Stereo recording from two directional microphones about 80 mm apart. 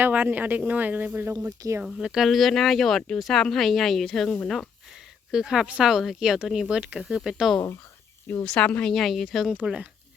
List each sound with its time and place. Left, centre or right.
0.0 s speech: right
1.5 s speech: right
1.8 s speech: centre
8.3 s a woman's voice: centre
8.9 s speech: centre